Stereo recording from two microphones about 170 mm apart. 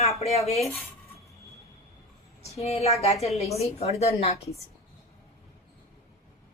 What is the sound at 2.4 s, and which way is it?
A woman's voice, 35° left (ahead or behind).